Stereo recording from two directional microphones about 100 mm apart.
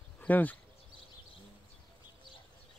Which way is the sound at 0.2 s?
15° left (ahead or behind).